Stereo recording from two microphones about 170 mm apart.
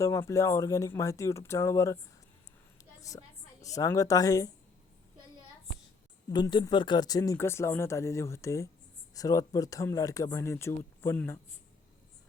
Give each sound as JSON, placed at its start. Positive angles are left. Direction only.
{"t": 0.0, "sound": "speech", "side_deg": 15}
{"t": 3.0, "sound": "a woman's voice", "side_deg": 20}
{"t": 6.3, "sound": "speech", "side_deg": 25}